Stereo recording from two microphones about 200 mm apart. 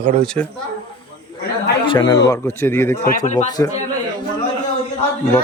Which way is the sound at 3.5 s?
20° left (ahead or behind).